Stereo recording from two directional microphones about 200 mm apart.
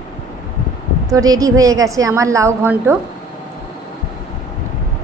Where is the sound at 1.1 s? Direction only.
15° right (ahead or behind).